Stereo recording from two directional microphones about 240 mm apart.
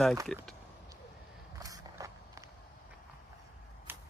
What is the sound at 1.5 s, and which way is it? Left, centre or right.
Walk, centre.